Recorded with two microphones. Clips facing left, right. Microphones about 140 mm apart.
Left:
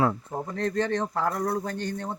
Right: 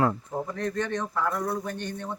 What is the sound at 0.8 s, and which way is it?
Speech, 30° left (ahead or behind).